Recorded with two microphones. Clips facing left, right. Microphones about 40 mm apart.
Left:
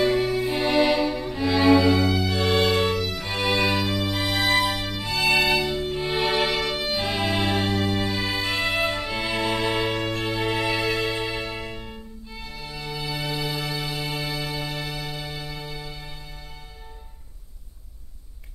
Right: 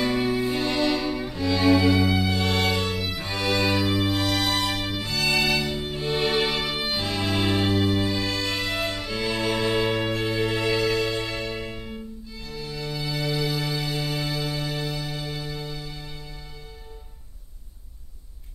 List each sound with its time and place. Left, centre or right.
0.0 s music: centre
0.5 s music: centre
1.0 s music: centre
1.3 s cello: centre
2.0 s music: centre
2.3 s music: centre
3.3 s music: centre
3.7 s music: centre
5.9 s music: centre
11.6 s violin: centre
12.3 s music: centre